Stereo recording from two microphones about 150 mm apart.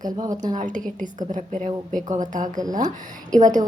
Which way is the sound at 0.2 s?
25° right (ahead or behind).